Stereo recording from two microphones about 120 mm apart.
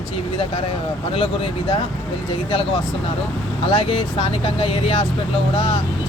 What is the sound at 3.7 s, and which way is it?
Speech, 50° left (ahead or behind).